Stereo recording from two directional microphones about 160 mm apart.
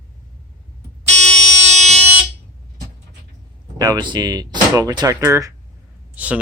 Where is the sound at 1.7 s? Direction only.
45° right (ahead or behind).